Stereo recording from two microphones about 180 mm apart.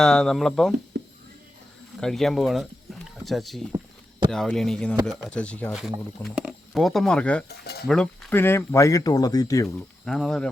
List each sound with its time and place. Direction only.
0.0 s speech: 5° left (ahead or behind)
2.0 s speech: centre (ahead or behind)
6.3 s speech: 5° right (ahead or behind)
7.4 s speech: 60° left (ahead or behind)
7.9 s speech: 5° left (ahead or behind)
9.6 s speech: centre (ahead or behind)